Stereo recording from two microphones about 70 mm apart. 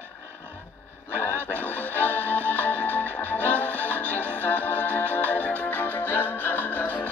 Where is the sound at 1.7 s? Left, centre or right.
Left.